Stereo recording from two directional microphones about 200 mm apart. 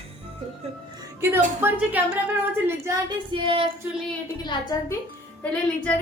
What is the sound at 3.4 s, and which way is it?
Child singing, 25° right (ahead or behind).